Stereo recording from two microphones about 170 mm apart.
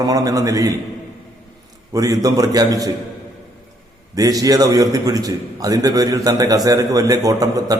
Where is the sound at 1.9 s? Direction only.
20° right (ahead or behind).